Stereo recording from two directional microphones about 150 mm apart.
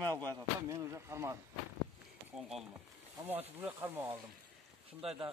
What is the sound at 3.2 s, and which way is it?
Speech, 10° right (ahead or behind).